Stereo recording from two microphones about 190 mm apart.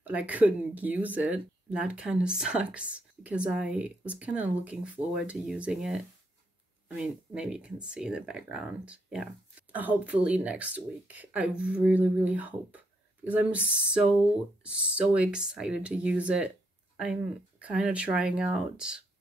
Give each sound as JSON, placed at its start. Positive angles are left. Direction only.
{"t": 0.0, "sound": "speech", "side_deg": -10}